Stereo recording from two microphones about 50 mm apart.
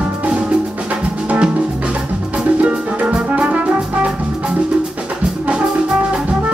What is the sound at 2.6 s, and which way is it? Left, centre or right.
Music, right.